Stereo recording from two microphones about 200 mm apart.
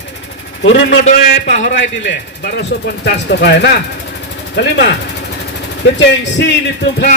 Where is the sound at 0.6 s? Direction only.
65° left (ahead or behind).